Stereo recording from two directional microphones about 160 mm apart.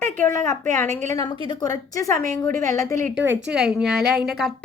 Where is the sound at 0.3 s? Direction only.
15° left (ahead or behind).